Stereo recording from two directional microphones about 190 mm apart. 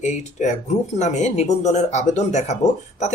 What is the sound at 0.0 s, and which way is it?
A woman's voice, 40° left (ahead or behind).